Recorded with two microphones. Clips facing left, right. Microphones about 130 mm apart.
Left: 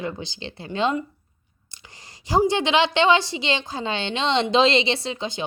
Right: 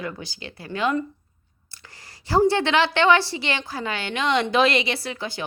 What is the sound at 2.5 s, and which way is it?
A woman's voice, 15° left (ahead or behind).